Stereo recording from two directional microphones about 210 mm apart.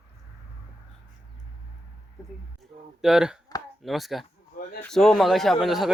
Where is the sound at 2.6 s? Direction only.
Centre (ahead or behind).